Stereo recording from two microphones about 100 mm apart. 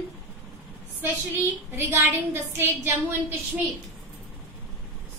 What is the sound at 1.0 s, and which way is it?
A woman's voice, 25° right (ahead or behind).